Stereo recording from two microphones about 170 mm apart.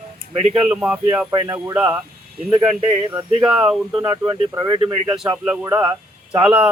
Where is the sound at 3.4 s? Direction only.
5° right (ahead or behind).